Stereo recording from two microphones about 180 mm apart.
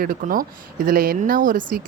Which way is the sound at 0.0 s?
50° right (ahead or behind).